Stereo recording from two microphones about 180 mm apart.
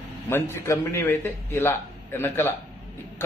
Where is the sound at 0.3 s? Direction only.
15° left (ahead or behind).